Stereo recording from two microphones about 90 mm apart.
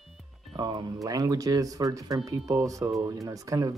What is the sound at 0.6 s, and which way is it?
Speech, 55° right (ahead or behind).